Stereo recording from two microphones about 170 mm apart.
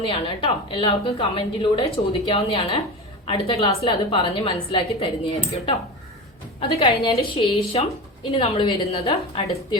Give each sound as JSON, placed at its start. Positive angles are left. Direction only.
{"t": 0.0, "sound": "a woman's voice", "side_deg": 35}